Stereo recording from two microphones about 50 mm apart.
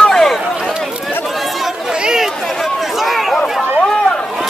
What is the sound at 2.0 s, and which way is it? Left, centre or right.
Chatter, centre.